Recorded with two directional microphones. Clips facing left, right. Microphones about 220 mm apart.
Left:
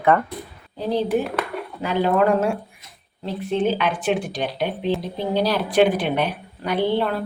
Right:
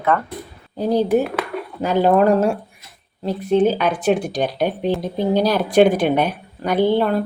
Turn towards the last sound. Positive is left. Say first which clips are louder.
# right 4 dB
turn(degrees=-45)  # may be behind; listen again after turning